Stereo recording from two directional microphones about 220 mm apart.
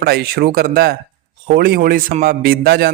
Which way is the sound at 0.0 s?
45° right (ahead or behind).